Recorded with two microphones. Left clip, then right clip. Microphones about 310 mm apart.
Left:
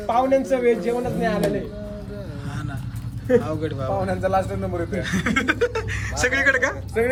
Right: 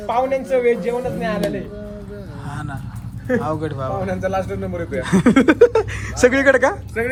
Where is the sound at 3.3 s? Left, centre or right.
Centre.